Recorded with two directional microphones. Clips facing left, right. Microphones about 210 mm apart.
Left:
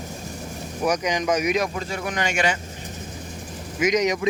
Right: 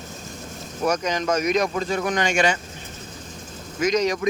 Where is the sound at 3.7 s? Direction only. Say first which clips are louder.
Even; 15° left (ahead or behind).